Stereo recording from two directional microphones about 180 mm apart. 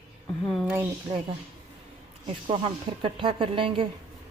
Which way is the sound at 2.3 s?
30° right (ahead or behind).